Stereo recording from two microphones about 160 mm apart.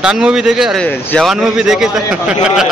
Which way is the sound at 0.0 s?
5° right (ahead or behind).